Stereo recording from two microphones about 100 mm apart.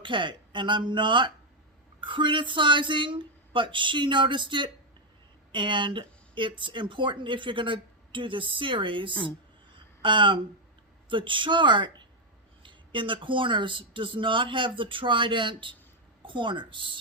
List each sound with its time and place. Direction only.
0.0 s a woman's voice: 55° right (ahead or behind)
9.7 s a sound: 55° right (ahead or behind)
11.1 s a woman's voice: 55° right (ahead or behind)